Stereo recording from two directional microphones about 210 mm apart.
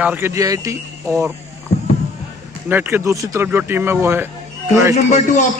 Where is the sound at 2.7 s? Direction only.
10° right (ahead or behind).